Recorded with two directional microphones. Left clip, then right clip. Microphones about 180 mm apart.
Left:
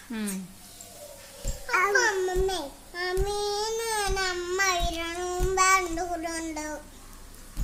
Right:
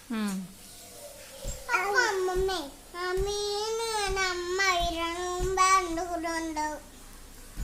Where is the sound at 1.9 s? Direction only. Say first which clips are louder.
Left 2 dB; 5° right (ahead or behind).